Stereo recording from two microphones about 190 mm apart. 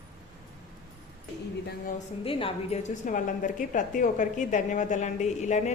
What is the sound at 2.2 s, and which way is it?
A woman's voice, 30° left (ahead or behind).